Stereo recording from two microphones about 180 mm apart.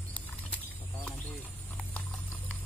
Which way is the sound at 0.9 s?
10° left (ahead or behind).